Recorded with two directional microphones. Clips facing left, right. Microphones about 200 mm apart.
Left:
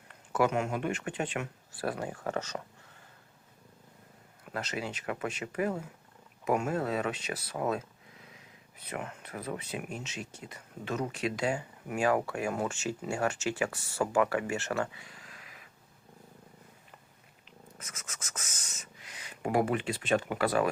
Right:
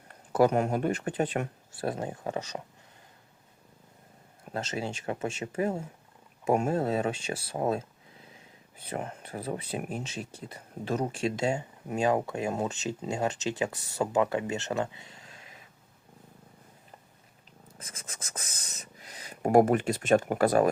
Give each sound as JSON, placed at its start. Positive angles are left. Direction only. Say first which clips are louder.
{"t": 0.1, "sound": "speech", "louder": "right 5 dB", "side_deg": -35}
{"t": 4.4, "sound": "speech", "louder": "right 3 dB", "side_deg": -25}
{"t": 17.7, "sound": "writing", "louder": "right 3 dB", "side_deg": -30}